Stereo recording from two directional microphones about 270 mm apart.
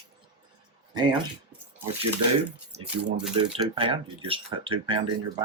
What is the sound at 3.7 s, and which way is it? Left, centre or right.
Speech, centre.